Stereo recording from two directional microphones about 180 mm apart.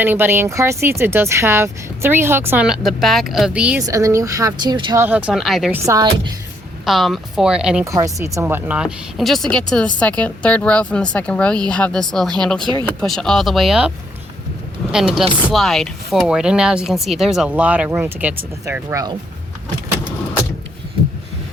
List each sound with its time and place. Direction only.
0.0 s speech: 10° right (ahead or behind)
3.8 s speech: 15° right (ahead or behind)
5.0 s speech: 5° right (ahead or behind)
5.7 s speech: 15° right (ahead or behind)
6.8 s speech: centre (ahead or behind)
7.9 s speech: 20° right (ahead or behind)
14.9 s speech: 5° right (ahead or behind)